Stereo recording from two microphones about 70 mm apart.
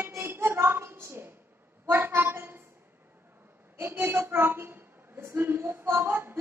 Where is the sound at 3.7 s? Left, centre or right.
Right.